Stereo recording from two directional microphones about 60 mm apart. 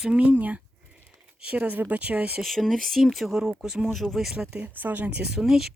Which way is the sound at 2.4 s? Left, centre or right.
Centre.